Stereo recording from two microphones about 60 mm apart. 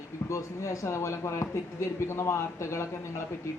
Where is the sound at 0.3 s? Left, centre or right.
Left.